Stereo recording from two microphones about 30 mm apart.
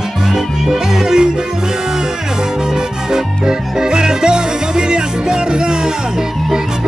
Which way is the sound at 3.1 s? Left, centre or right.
Right.